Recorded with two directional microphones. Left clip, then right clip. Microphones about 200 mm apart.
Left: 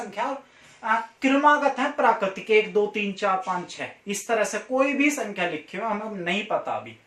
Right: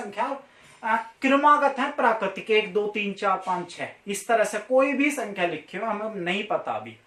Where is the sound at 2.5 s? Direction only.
Centre (ahead or behind).